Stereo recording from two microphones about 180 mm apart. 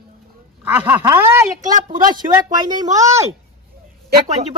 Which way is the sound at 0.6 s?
10° right (ahead or behind).